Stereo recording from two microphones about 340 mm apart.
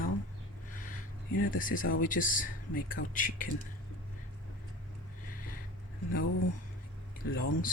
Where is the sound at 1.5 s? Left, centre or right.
Left.